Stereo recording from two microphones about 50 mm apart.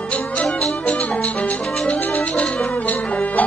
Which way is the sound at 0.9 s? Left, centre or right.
Left.